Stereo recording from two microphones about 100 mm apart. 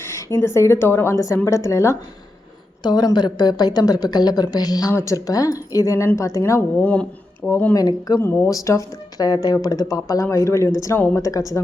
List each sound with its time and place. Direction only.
0.1 s speech: 30° left (ahead or behind)
2.8 s a woman's voice: 45° left (ahead or behind); by 6.8 s 30° left (ahead or behind)
6.8 s speech: 10° left (ahead or behind)
7.7 s speech: 40° left (ahead or behind)
8.2 s speech: 25° left (ahead or behind)